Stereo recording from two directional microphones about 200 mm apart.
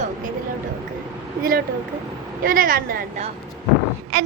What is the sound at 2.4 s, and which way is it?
Speech, 45° right (ahead or behind).